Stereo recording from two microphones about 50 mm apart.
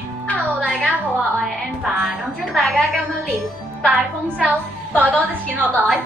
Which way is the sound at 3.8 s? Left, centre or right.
Right.